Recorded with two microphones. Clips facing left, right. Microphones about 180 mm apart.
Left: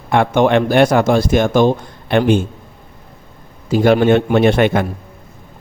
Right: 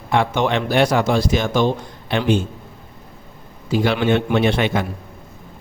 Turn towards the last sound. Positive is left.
turn(degrees=55)  # may be behind; listen again after turning